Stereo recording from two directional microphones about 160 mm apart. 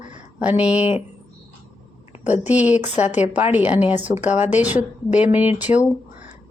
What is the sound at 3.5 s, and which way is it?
Speech, 10° right (ahead or behind).